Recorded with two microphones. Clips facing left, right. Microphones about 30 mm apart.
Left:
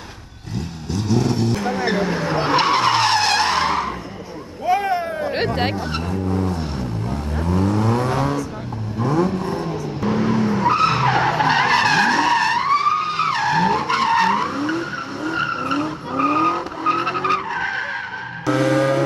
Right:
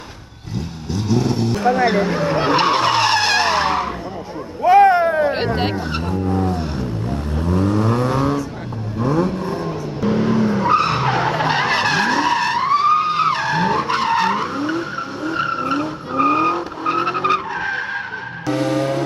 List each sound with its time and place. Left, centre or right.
0.9 s speech: centre
1.9 s vehicle: centre
4.6 s a sound: right
5.6 s speech: centre
6.2 s vehicle: centre
18.5 s vehicle: left